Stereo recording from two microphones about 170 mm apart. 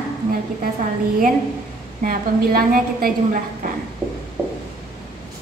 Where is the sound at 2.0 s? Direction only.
55° right (ahead or behind).